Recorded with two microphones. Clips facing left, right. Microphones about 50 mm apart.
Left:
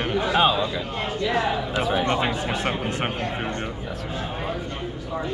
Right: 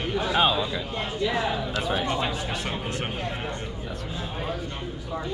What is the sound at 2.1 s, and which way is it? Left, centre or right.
Speech, left.